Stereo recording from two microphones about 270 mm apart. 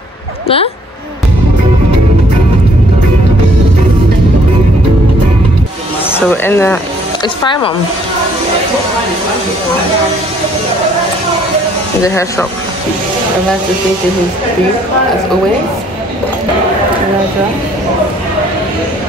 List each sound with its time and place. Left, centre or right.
6.1 s speech: centre
12.0 s speech: centre